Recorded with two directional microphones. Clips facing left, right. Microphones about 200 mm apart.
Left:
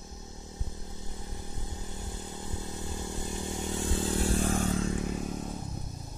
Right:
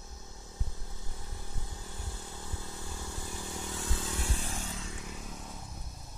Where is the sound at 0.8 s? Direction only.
20° left (ahead or behind); by 5.6 s 40° left (ahead or behind).